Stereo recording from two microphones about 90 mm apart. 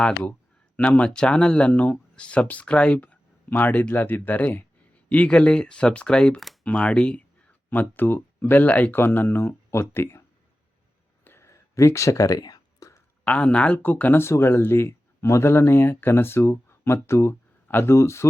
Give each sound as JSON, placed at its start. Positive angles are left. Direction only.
{"t": 0.0, "sound": "speech", "side_deg": 15}
{"t": 11.3, "sound": "a sound", "side_deg": 30}
{"t": 13.2, "sound": "speech", "side_deg": 15}